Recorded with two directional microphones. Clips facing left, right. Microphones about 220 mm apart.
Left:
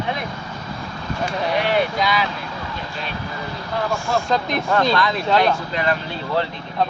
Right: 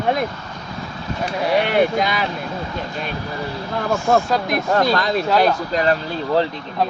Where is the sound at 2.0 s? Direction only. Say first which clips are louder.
Even; 50° right (ahead or behind).